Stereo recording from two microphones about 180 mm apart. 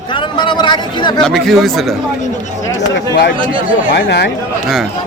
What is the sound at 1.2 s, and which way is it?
Speech, centre (ahead or behind).